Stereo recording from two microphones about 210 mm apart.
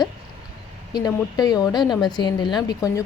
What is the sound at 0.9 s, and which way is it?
Speech, 20° left (ahead or behind).